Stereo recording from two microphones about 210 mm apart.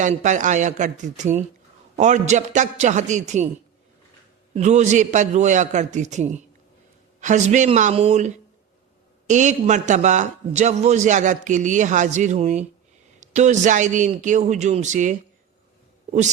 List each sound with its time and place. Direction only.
0.0 s a man's voice: 35° right (ahead or behind)
4.5 s a man's voice: 35° right (ahead or behind)